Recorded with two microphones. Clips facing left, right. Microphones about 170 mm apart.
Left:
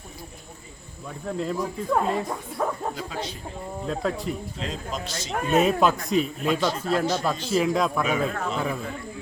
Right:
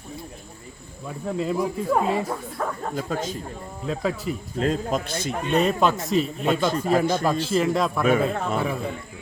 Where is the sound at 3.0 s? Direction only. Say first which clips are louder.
Right 5 dB; 45° right (ahead or behind).